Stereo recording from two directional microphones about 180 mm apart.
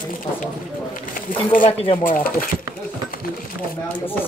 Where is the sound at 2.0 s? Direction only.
50° left (ahead or behind).